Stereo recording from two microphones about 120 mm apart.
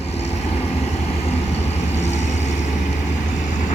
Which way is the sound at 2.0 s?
70° left (ahead or behind).